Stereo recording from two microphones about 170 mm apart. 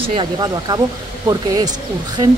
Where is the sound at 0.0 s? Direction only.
30° right (ahead or behind).